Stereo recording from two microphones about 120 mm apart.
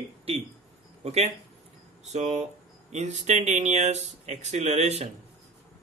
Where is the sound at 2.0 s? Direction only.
75° right (ahead or behind).